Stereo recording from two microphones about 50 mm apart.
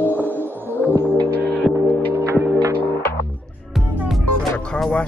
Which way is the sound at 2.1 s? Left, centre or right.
Right.